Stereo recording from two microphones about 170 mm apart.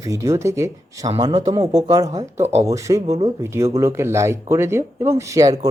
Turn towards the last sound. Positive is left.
turn(degrees=-20)  # may be behind; listen again after turning